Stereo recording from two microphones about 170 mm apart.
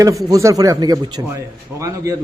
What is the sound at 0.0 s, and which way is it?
A man's voice, 20° right (ahead or behind).